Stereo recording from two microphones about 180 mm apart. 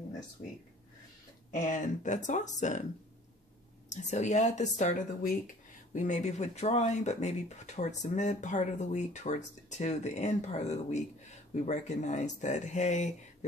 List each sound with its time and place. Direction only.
1.5 s speech: 45° left (ahead or behind)
3.9 s speech: 40° left (ahead or behind)